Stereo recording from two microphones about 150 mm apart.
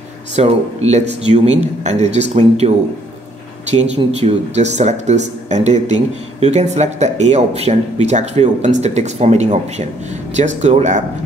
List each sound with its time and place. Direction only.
0.4 s speech: 45° right (ahead or behind)
3.7 s speech: 50° right (ahead or behind)